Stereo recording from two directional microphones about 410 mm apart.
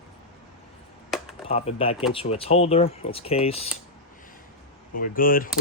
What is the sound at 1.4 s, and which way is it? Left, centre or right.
Speech, centre.